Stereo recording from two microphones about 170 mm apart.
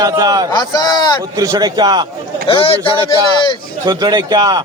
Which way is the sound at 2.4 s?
30° left (ahead or behind).